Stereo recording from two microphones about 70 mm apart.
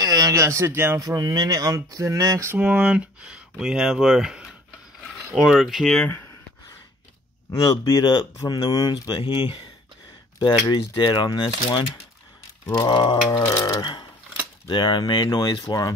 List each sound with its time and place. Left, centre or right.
0.0 s speech: right
0.9 s speech: right
2.6 s speech: centre
5.6 s speech: centre
7.5 s speech: left
8.4 s speech: left
12.6 s a sound: left
13.6 s speech: left
14.7 s a sound: left
15.2 s speech: left